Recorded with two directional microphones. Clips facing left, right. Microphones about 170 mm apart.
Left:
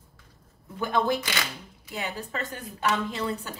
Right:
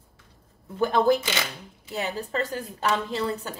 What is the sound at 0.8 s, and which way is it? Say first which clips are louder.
Speech: right 5 dB; 40° right (ahead or behind).